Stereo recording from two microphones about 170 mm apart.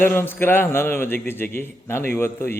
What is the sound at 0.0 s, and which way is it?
A man's voice, 10° left (ahead or behind).